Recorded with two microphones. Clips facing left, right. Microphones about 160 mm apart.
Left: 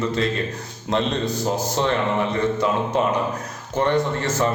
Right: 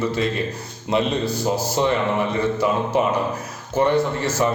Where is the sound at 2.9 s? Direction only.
10° right (ahead or behind).